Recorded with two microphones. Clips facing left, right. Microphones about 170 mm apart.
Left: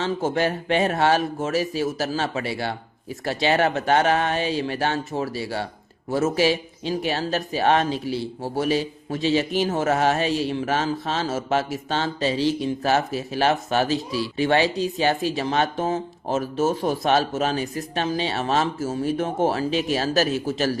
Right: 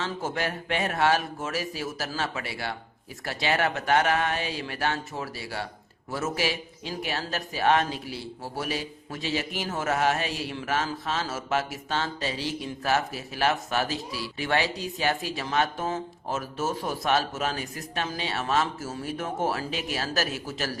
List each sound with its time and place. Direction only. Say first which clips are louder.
0.0 s speech: left 7 dB; 25° left (ahead or behind)